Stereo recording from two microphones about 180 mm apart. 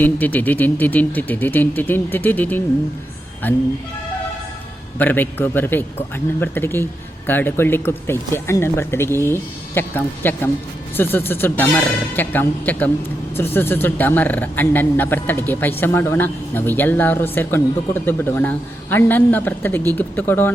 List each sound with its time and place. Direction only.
0.0 s speech: 10° left (ahead or behind)
4.9 s speech: 10° left (ahead or behind)